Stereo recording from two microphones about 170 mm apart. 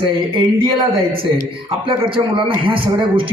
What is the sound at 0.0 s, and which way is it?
A man's voice, 30° right (ahead or behind).